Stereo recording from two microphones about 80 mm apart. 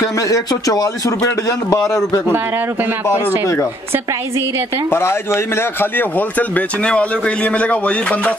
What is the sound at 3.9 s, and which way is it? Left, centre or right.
Speech, right.